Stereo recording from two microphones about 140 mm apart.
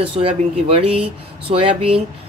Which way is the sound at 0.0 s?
40° right (ahead or behind).